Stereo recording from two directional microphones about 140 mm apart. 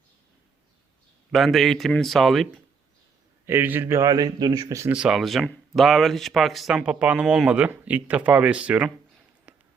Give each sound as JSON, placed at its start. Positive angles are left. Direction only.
{"t": 1.3, "sound": "speech", "side_deg": 0}
{"t": 3.4, "sound": "speech", "side_deg": -15}
{"t": 4.9, "sound": "speech", "side_deg": -5}
{"t": 9.5, "sound": "a sound", "side_deg": -10}